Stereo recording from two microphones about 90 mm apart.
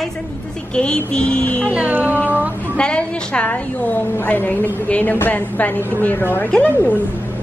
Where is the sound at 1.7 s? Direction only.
15° right (ahead or behind).